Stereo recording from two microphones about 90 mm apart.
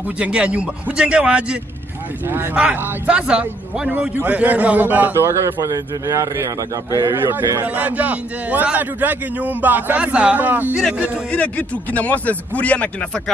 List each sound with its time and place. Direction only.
0.2 s a man's voice: 15° right (ahead or behind)
5.4 s a man's voice: 40° right (ahead or behind); by 10.8 s 20° right (ahead or behind)
11.3 s speech: 15° left (ahead or behind)